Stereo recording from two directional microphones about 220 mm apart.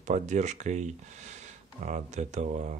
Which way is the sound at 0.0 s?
30° right (ahead or behind).